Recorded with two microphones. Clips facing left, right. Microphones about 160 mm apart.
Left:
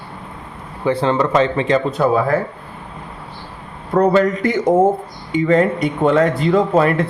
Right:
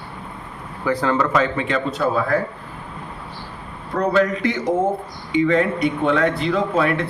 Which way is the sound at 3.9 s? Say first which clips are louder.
Left 5 dB; 50° left (ahead or behind).